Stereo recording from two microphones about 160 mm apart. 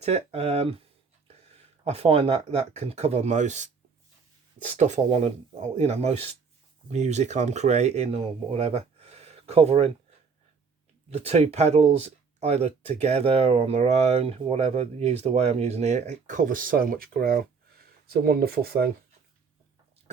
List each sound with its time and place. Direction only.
0.0 s speech: 40° right (ahead or behind)
1.8 s speech: 40° right (ahead or behind)
4.7 s speech: 45° right (ahead or behind)
11.1 s speech: 40° right (ahead or behind); by 18.9 s 75° right (ahead or behind)